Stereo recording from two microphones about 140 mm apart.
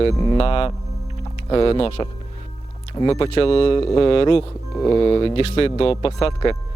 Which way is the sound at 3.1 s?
45° left (ahead or behind).